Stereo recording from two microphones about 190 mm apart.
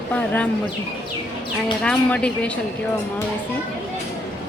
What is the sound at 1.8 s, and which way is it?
Speech, 5° left (ahead or behind).